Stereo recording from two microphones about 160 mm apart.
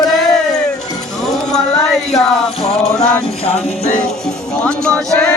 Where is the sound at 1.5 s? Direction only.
Centre (ahead or behind).